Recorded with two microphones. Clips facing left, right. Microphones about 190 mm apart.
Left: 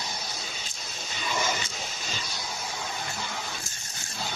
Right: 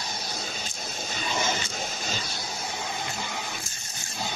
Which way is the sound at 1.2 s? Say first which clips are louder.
Even; 25° right (ahead or behind).